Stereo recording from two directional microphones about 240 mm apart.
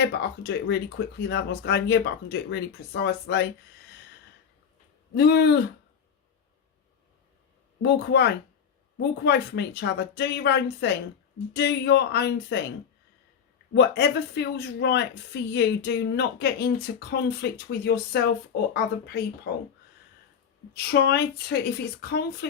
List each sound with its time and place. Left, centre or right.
0.0 s speech: left
5.1 s speech: left
7.8 s speech: left
13.7 s speech: left
20.7 s speech: left